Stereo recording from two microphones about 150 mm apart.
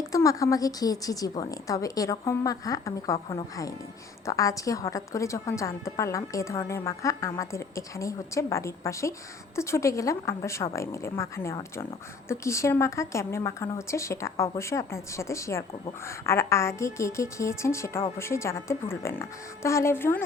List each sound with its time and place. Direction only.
0.1 s a woman's voice: 20° left (ahead or behind)